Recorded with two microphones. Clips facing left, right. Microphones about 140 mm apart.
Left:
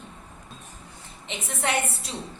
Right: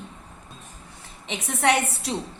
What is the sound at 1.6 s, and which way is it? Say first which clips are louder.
Speech: right 5 dB; 75° right (ahead or behind).